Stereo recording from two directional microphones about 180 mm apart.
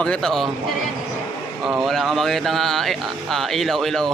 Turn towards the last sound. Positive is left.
turn(degrees=0)  # may be behind; listen again after turning